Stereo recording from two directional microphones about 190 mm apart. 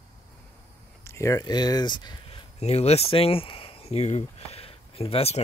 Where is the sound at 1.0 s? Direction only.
15° left (ahead or behind).